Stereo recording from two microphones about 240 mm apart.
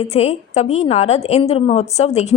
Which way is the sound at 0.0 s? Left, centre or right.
Left.